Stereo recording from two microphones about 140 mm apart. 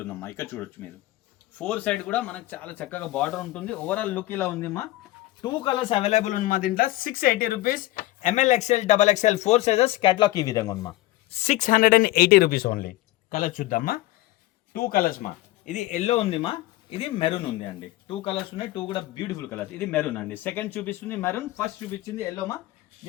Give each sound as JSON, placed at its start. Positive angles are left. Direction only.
{"t": 0.0, "sound": "speech", "side_deg": 15}
{"t": 5.4, "sound": "speech", "side_deg": 30}
{"t": 11.3, "sound": "speech", "side_deg": 50}